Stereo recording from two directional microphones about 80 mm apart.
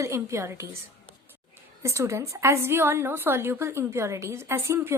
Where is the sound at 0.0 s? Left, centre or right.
Right.